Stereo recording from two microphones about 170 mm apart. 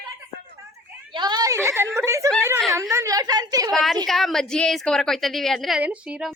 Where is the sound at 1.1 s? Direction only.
25° right (ahead or behind).